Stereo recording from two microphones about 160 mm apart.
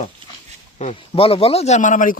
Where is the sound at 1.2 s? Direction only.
35° left (ahead or behind); by 2.1 s 55° left (ahead or behind).